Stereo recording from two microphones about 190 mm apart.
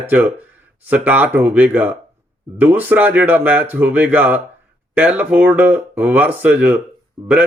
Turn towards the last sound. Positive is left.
turn(degrees=-10)  # may be behind; listen again after turning